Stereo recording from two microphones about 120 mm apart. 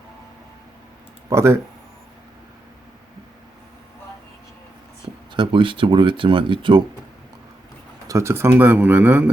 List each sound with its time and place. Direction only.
1.3 s speech: 25° right (ahead or behind)
5.3 s speech: 45° right (ahead or behind)
8.0 s speech: 25° right (ahead or behind)